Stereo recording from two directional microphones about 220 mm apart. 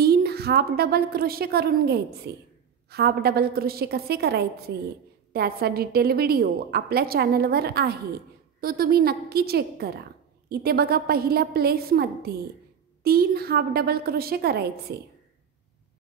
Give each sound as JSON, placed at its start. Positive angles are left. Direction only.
{"t": 0.0, "sound": "a woman's voice", "side_deg": -45}